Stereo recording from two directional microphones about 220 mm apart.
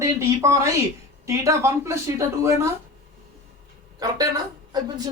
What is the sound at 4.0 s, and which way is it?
A man's voice, 15° right (ahead or behind).